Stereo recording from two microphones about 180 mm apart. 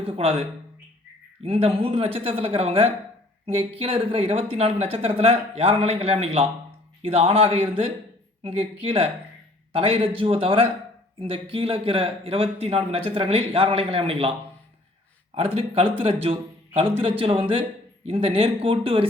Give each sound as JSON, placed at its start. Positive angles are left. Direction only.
{"t": 0.2, "sound": "a man's voice", "side_deg": -30}
{"t": 15.4, "sound": "a man's voice", "side_deg": -35}